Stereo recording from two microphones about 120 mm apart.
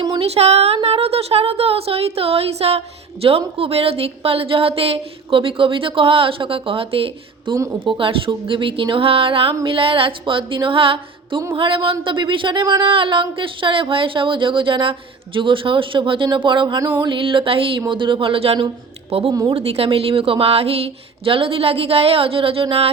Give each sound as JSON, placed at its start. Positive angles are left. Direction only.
{"t": 0.2, "sound": "speech", "side_deg": -60}
{"t": 7.5, "sound": "speech", "side_deg": -20}
{"t": 7.9, "sound": "speech", "side_deg": -45}
{"t": 19.3, "sound": "a woman's voice", "side_deg": -30}
{"t": 19.5, "sound": "speech", "side_deg": -55}